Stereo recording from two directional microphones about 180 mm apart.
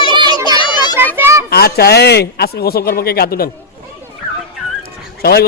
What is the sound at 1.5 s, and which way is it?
Speech, 60° left (ahead or behind).